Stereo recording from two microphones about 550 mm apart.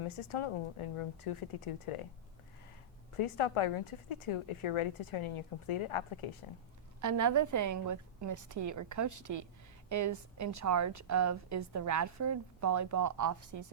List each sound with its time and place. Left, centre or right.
0.0 s a woman's voice: left
3.2 s a woman's voice: left
7.0 s a woman's voice: right